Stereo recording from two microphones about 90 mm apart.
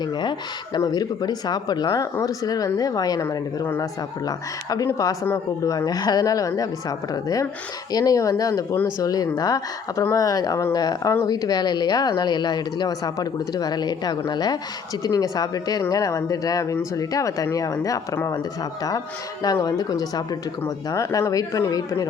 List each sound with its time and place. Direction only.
0.0 s speech: 55° left (ahead or behind)
4.3 s speech: 45° left (ahead or behind)